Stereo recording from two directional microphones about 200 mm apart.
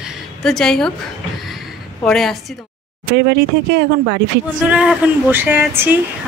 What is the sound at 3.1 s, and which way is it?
Speech, 55° right (ahead or behind).